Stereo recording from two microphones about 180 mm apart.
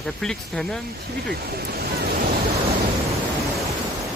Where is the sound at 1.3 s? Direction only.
60° right (ahead or behind).